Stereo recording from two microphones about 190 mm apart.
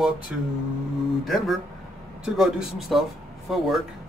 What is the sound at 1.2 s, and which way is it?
A man's voice, centre (ahead or behind).